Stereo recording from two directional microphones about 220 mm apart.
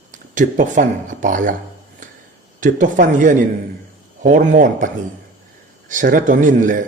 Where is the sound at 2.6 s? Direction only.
35° right (ahead or behind).